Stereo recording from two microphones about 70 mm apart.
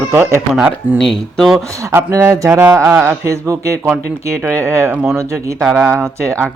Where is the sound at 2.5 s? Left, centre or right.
Right.